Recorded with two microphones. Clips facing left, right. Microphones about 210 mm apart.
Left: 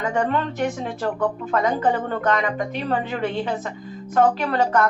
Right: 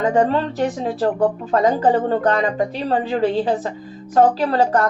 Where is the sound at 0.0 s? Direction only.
35° right (ahead or behind).